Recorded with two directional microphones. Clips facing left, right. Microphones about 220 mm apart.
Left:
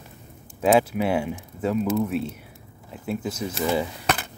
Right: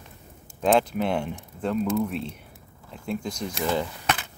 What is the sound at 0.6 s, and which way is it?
Speech, 5° left (ahead or behind).